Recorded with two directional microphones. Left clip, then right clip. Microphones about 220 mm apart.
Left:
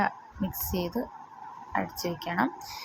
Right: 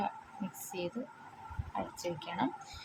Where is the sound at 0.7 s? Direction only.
20° left (ahead or behind).